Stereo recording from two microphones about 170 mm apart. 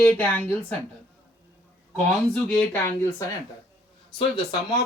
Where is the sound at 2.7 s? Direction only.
15° left (ahead or behind).